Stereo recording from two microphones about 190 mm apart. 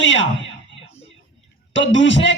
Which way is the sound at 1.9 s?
75° left (ahead or behind).